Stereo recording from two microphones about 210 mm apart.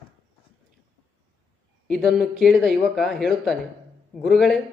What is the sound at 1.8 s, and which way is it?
Speech, centre (ahead or behind).